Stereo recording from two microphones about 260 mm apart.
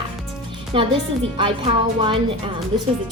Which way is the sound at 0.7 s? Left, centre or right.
Right.